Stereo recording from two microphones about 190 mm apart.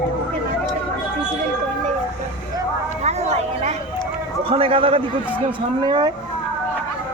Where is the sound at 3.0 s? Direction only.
35° right (ahead or behind).